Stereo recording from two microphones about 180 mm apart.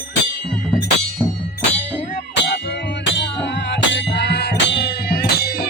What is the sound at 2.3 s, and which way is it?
Music, 70° left (ahead or behind).